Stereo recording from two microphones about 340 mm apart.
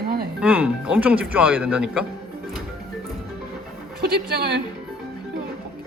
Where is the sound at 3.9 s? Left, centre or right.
Right.